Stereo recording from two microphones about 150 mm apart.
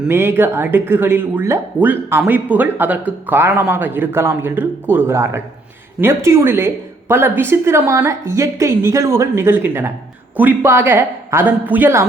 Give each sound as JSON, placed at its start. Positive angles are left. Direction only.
{"t": 0.0, "sound": "speech", "side_deg": -15}